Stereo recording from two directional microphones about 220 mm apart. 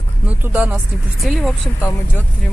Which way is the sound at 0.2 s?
5° right (ahead or behind).